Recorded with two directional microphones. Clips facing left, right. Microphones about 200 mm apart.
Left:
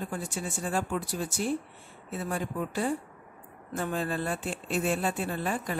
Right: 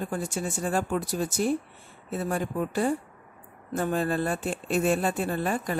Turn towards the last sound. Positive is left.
turn(degrees=-45)  # may be behind; listen again after turning